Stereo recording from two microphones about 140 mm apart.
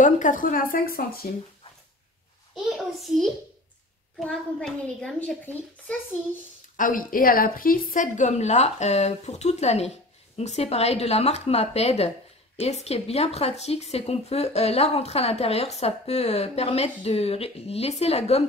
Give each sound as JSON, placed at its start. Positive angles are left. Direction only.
{"t": 0.0, "sound": "speech", "side_deg": 65}
{"t": 3.1, "sound": "a child's voice", "side_deg": -5}
{"t": 4.2, "sound": "a child's voice", "side_deg": 5}
{"t": 6.8, "sound": "speech", "side_deg": 75}